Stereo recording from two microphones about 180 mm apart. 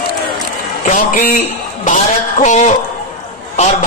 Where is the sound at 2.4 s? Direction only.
40° left (ahead or behind).